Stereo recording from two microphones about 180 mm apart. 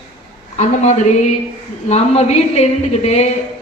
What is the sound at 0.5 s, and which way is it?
A woman's voice, 40° left (ahead or behind).